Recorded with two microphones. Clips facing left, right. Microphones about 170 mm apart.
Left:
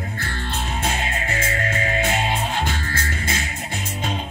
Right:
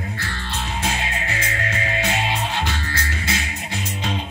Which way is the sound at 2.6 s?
50° left (ahead or behind).